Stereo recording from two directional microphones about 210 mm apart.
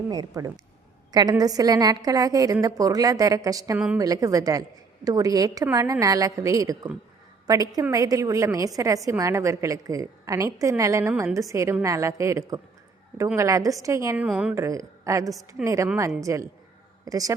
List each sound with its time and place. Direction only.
0.1 s a woman's voice: 15° right (ahead or behind)
15.3 s a woman's voice: centre (ahead or behind)
15.6 s a woman's voice: 15° right (ahead or behind)